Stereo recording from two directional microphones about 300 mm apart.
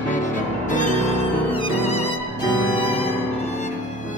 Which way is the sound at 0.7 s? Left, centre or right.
Left.